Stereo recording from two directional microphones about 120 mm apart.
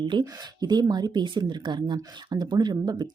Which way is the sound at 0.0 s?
40° right (ahead or behind).